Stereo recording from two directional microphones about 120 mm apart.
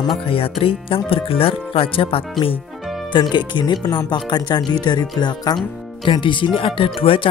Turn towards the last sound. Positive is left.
turn(degrees=50)  # may be behind; listen again after turning